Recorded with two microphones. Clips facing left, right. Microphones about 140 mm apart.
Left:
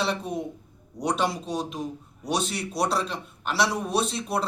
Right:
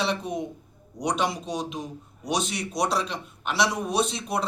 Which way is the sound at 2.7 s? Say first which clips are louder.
Even; 5° left (ahead or behind).